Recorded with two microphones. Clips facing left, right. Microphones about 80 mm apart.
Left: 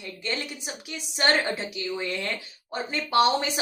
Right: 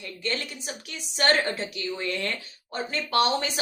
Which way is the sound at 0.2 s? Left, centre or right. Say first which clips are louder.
Right 1 dB; centre.